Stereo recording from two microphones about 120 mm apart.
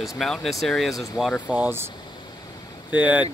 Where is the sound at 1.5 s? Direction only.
15° right (ahead or behind).